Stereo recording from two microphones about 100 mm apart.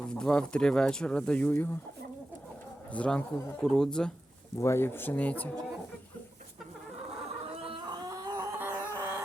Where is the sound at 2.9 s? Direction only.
15° left (ahead or behind).